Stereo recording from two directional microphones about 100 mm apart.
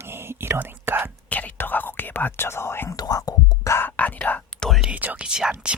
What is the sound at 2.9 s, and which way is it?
Whispering, 40° left (ahead or behind).